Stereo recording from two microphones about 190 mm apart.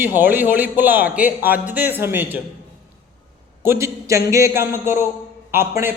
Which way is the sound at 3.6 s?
15° right (ahead or behind).